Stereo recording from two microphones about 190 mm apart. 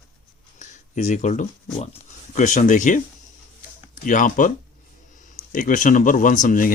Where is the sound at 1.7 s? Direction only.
35° left (ahead or behind).